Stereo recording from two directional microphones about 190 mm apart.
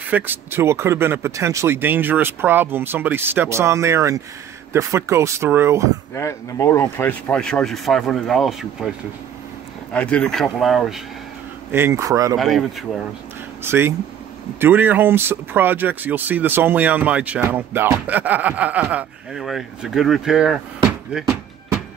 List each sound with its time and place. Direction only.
0.1 s speech: 10° right (ahead or behind)
6.1 s speech: 15° left (ahead or behind); by 8.9 s centre (ahead or behind)
9.9 s speech: 5° left (ahead or behind)
11.7 s speech: 15° right (ahead or behind)
12.4 s speech: centre (ahead or behind)
13.7 s speech: 10° right (ahead or behind)